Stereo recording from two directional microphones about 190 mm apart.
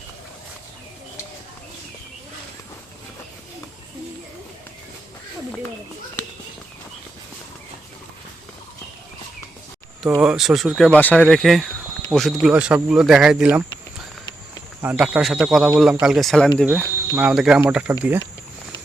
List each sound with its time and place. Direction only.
10.2 s speech: 5° right (ahead or behind)
14.8 s speech: 10° right (ahead or behind)
16.6 s speech: 10° right (ahead or behind)